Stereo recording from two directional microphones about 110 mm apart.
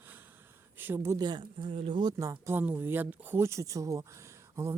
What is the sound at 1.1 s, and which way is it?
Speech, 40° right (ahead or behind).